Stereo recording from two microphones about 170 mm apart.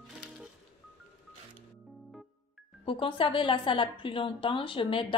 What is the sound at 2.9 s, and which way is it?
A woman's voice, 30° left (ahead or behind).